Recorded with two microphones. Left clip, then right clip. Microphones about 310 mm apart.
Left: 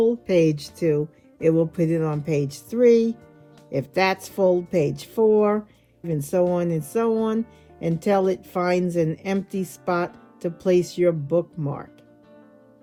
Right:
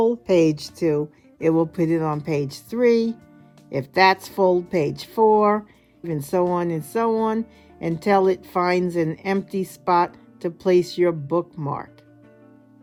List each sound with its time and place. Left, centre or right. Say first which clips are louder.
0.0 s speech: right 1 dB; centre